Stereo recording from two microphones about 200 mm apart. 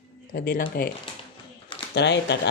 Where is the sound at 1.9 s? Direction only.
60° left (ahead or behind).